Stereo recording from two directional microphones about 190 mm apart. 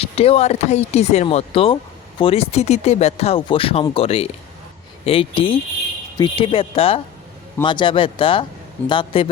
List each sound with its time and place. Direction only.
0.0 s speech: 30° left (ahead or behind)